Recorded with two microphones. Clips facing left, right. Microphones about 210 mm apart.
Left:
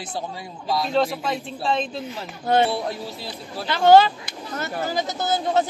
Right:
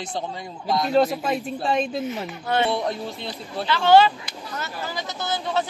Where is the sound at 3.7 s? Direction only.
45° left (ahead or behind).